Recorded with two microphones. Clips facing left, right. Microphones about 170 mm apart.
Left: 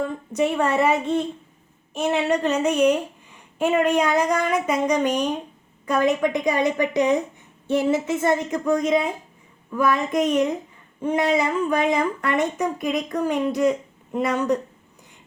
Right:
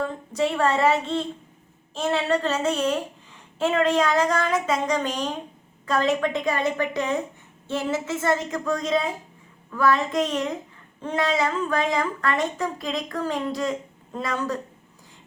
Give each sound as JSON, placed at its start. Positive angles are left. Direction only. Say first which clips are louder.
{"t": 0.3, "sound": "speech", "louder": "left 2 dB", "side_deg": 15}